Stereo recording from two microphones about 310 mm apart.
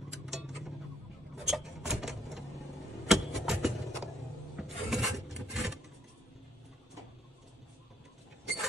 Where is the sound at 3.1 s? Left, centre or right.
Centre.